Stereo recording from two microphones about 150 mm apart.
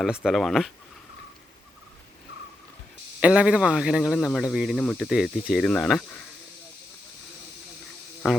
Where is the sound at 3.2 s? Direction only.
5° right (ahead or behind).